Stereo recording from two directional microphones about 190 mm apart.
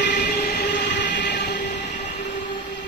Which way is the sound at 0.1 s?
50° left (ahead or behind).